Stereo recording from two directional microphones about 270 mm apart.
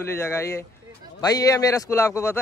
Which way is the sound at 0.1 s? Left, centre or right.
Centre.